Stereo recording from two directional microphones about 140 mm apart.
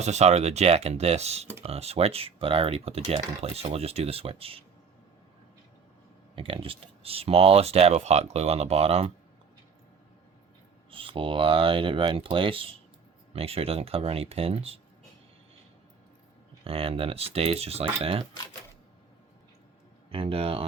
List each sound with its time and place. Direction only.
0.0 s speech: 55° right (ahead or behind)
6.3 s speech: 40° right (ahead or behind)
10.9 s speech: 40° right (ahead or behind)
16.6 s speech: 40° right (ahead or behind)
20.1 s speech: 40° right (ahead or behind)